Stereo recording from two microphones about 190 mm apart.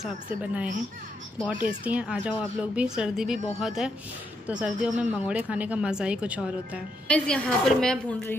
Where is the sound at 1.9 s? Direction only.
5° right (ahead or behind).